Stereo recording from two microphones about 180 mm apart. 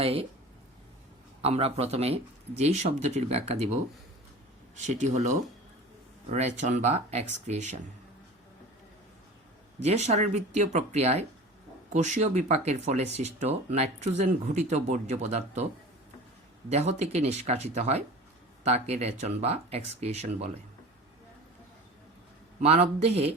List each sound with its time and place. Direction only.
0.0 s speech: 30° right (ahead or behind)
1.4 s speech: 35° right (ahead or behind)
4.9 s speech: 40° right (ahead or behind)
9.8 s speech: 40° right (ahead or behind)
16.6 s speech: 35° right (ahead or behind)
22.6 s speech: 35° right (ahead or behind)